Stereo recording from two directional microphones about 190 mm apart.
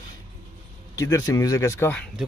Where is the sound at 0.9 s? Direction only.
15° left (ahead or behind).